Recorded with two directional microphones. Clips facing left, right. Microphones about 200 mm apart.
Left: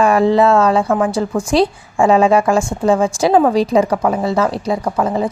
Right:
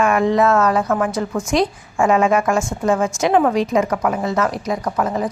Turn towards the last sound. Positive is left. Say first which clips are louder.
# left 3 dB
turn(degrees=25)  # may be behind; listen again after turning